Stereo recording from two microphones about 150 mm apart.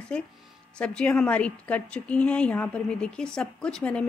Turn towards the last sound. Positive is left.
turn(degrees=5)  # may be behind; listen again after turning